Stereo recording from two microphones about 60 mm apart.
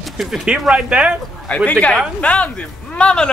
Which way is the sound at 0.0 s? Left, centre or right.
Centre.